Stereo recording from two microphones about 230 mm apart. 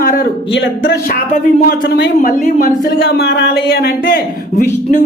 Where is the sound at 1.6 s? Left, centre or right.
Left.